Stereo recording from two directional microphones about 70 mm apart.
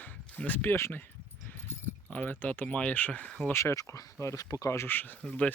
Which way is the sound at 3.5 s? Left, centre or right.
Left.